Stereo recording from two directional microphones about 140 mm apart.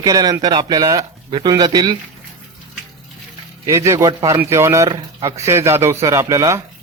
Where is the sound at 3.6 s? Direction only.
20° right (ahead or behind).